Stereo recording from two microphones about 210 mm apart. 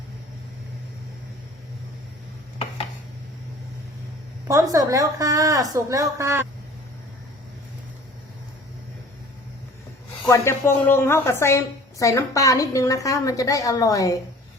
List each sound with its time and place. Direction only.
4.4 s a woman's voice: 15° right (ahead or behind)
10.2 s a woman's voice: 15° left (ahead or behind)